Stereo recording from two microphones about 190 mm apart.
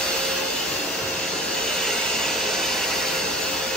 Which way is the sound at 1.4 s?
5° left (ahead or behind).